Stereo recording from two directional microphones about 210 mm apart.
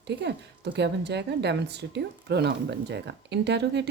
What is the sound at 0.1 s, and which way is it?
Speech, 55° right (ahead or behind).